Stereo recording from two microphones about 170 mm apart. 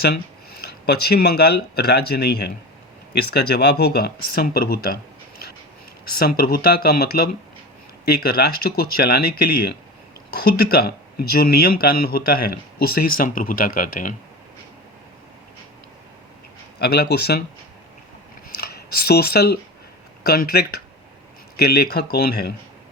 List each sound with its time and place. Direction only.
0.9 s speech: 70° left (ahead or behind)
6.1 s speech: 60° left (ahead or behind)
16.8 s speech: 70° left (ahead or behind)
18.6 s speech: 65° left (ahead or behind)